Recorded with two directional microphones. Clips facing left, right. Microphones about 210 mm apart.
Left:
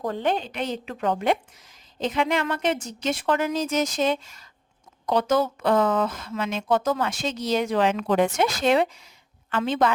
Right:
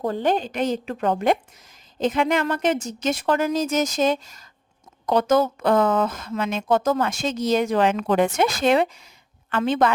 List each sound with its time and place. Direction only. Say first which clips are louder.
0.0 s a woman's voice: right 3 dB; 35° right (ahead or behind); by 9.9 s 55° right (ahead or behind)